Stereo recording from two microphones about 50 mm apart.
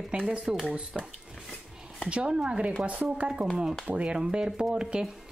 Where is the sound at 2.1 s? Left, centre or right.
Right.